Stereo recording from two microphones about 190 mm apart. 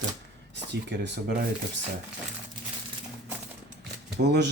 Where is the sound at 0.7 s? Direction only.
65° right (ahead or behind).